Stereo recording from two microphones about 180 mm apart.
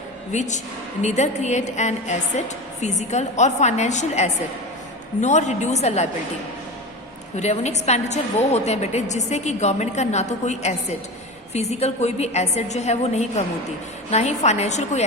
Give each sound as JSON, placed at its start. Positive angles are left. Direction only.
{"t": 0.3, "sound": "a woman's voice", "side_deg": 40}
{"t": 7.3, "sound": "a woman's voice", "side_deg": 40}